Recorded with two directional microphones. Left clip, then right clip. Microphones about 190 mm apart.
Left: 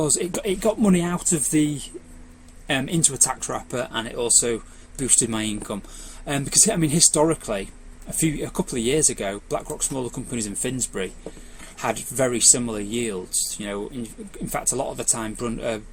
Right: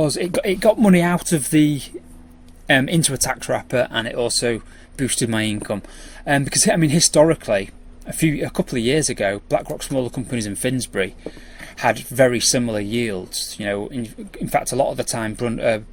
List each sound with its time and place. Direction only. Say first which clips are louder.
0.0 s speech: right 4 dB; 40° right (ahead or behind)